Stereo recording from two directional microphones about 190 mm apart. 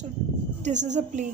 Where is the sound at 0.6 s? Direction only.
40° right (ahead or behind).